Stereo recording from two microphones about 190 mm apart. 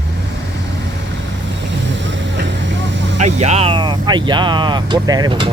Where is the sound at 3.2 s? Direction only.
35° right (ahead or behind).